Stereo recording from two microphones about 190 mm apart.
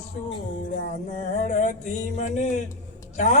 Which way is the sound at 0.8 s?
45° left (ahead or behind).